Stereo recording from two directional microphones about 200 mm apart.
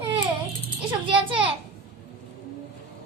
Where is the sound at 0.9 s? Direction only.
25° right (ahead or behind).